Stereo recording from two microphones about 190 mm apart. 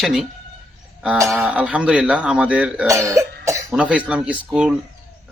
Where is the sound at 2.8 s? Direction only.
15° right (ahead or behind).